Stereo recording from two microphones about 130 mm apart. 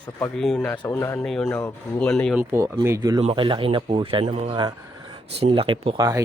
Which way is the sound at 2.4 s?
15° right (ahead or behind).